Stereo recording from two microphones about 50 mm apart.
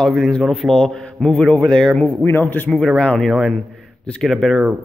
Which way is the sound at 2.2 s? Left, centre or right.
Left.